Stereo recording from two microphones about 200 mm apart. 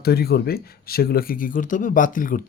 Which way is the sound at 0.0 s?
50° left (ahead or behind).